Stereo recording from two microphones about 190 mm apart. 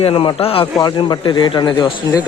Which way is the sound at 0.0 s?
30° left (ahead or behind).